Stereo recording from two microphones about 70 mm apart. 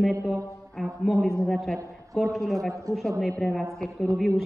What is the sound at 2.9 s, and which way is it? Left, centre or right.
Speech, right.